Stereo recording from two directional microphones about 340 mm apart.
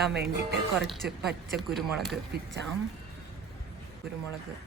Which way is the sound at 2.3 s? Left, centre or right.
Right.